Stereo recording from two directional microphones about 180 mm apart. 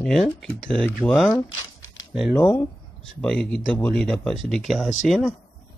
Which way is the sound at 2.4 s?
15° left (ahead or behind).